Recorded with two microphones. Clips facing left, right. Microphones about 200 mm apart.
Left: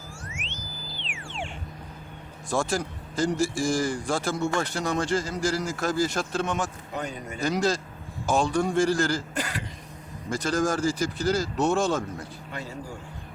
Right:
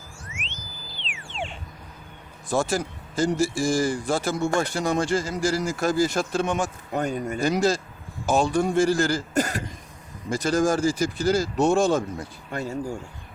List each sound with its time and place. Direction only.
2.5 s speech: 5° right (ahead or behind)
6.9 s speech: 50° right (ahead or behind)
7.4 s speech: 10° right (ahead or behind)
9.3 s speech: 45° right (ahead or behind)
10.2 s speech: 10° right (ahead or behind)
12.5 s speech: 45° right (ahead or behind)